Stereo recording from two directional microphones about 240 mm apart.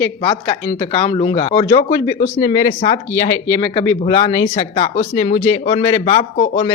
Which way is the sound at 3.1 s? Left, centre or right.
Centre.